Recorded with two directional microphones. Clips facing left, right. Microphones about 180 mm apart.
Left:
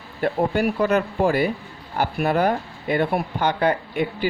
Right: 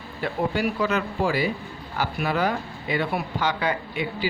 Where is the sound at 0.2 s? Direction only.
55° left (ahead or behind).